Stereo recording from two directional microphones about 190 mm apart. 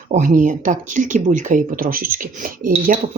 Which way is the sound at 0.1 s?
40° right (ahead or behind).